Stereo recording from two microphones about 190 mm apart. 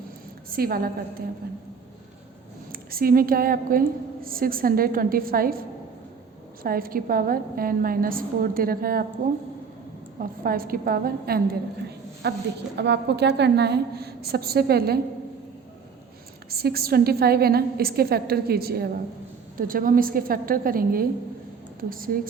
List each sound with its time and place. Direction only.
0.5 s a woman's voice: 50° right (ahead or behind)
2.7 s a woman's voice: 50° right (ahead or behind)
10.2 s a woman's voice: 50° right (ahead or behind)
12.2 s a woman's voice: 60° right (ahead or behind)
16.5 s a woman's voice: 55° right (ahead or behind)